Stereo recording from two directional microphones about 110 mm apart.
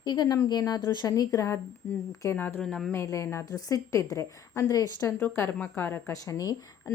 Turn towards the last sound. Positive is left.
turn(degrees=35)  # may be behind; listen again after turning